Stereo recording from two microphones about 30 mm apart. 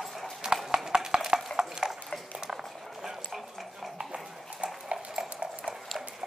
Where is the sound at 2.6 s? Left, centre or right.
Centre.